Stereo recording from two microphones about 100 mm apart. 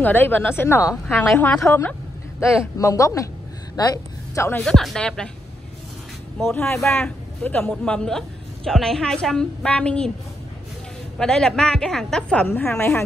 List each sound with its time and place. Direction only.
0.0 s a woman's voice: 20° left (ahead or behind)
1.0 s a woman's voice: centre (ahead or behind)
1.6 s a woman's voice: 20° left (ahead or behind)
3.7 s a sound: 40° left (ahead or behind)
4.6 s a woman's voice: 5° left (ahead or behind)
6.6 s a woman's voice: 5° left (ahead or behind)
7.0 s a man's voice: 15° left (ahead or behind)
11.1 s a woman's voice: 10° left (ahead or behind)
12.4 s a woman's voice: 25° left (ahead or behind)